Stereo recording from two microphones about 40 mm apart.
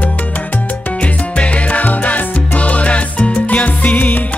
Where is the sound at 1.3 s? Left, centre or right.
Left.